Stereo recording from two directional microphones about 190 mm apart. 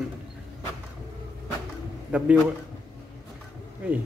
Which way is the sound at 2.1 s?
5° right (ahead or behind).